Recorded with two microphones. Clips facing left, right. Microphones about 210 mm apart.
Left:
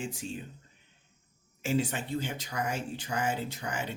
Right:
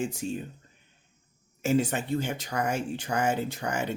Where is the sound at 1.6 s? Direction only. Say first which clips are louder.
Right 5 dB; 45° right (ahead or behind).